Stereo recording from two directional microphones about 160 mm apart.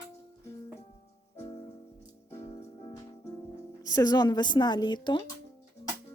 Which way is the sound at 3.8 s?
20° left (ahead or behind).